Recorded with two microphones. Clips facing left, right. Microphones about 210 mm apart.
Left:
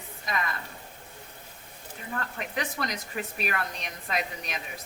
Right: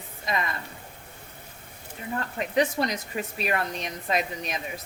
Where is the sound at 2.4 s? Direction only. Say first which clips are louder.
Right 11 dB; 30° right (ahead or behind).